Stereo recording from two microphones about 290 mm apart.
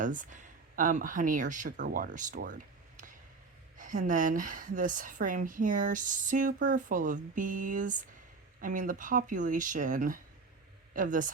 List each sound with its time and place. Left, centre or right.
0.0 s speech: right
3.8 s speech: right